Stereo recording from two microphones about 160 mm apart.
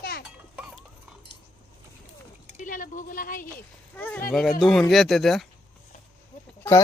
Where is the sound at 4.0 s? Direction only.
10° left (ahead or behind).